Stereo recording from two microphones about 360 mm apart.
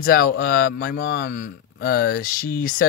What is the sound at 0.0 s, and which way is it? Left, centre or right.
Speech, left.